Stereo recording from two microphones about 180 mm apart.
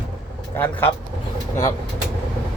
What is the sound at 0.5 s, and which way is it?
Speech, 10° left (ahead or behind).